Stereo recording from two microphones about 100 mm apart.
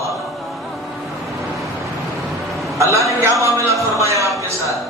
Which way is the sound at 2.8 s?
30° right (ahead or behind).